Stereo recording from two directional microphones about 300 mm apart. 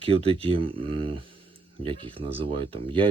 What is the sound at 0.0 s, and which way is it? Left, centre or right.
A man's voice, centre.